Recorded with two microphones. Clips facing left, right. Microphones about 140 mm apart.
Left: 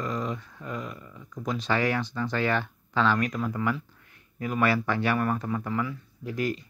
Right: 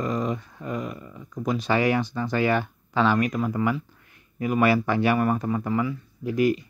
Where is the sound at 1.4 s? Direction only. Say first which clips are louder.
Right 4 dB; 10° right (ahead or behind).